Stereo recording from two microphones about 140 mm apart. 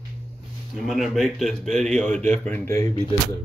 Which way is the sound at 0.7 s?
Centre (ahead or behind).